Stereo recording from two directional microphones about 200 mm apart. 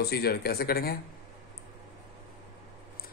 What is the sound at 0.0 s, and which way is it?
Speech, 50° left (ahead or behind).